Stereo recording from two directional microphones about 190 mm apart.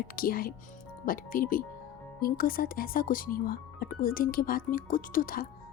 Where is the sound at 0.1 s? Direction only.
50° left (ahead or behind).